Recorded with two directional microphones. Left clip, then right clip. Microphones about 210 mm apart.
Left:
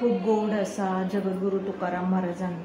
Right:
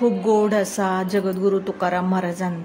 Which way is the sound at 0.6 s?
55° right (ahead or behind).